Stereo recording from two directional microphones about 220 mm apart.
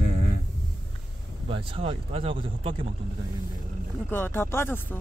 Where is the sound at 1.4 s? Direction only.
25° right (ahead or behind).